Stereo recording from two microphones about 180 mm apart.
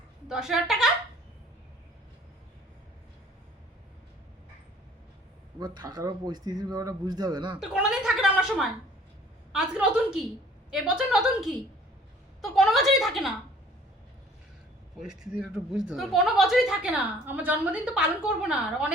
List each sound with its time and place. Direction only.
0.3 s speech: 5° right (ahead or behind)
5.5 s speech: 25° right (ahead or behind)
7.6 s speech: centre (ahead or behind)
14.9 s speech: centre (ahead or behind)